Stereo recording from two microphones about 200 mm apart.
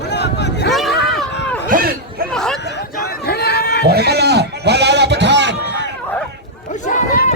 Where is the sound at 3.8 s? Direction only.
55° right (ahead or behind).